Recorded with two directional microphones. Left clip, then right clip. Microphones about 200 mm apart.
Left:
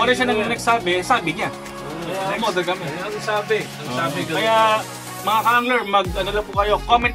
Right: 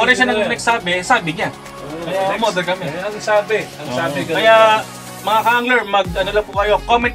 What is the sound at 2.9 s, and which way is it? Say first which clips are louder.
Speech: right 6 dB; centre (ahead or behind).